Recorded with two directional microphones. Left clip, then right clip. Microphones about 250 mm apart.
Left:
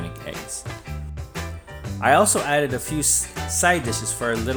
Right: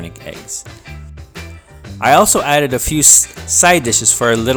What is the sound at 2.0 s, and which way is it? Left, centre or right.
Speech, right.